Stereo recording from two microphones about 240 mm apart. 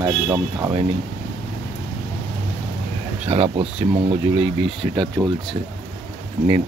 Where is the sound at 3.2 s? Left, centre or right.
Right.